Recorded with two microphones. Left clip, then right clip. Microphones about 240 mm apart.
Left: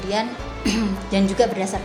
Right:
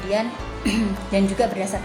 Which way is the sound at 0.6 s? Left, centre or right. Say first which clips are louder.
Left 1 dB; left.